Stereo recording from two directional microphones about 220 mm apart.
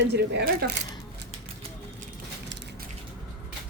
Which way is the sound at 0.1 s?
50° right (ahead or behind).